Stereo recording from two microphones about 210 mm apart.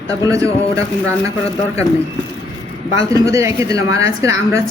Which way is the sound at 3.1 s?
15° right (ahead or behind).